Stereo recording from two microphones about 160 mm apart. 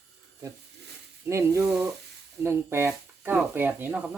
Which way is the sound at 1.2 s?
15° right (ahead or behind).